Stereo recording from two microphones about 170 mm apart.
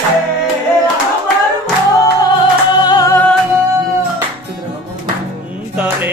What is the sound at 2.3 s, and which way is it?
Music, 25° left (ahead or behind).